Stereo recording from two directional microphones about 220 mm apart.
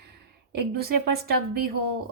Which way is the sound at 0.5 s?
45° right (ahead or behind).